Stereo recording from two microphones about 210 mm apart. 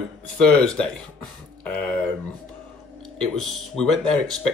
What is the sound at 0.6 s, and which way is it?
Speech, 5° left (ahead or behind).